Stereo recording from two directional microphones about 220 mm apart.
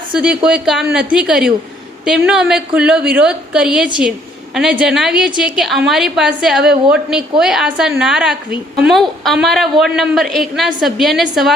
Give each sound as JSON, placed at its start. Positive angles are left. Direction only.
{"t": 0.1, "sound": "a woman's voice", "side_deg": -5}